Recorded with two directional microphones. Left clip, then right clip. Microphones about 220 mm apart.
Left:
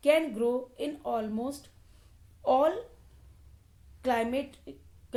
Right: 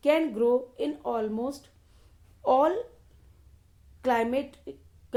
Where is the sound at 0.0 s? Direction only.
30° right (ahead or behind).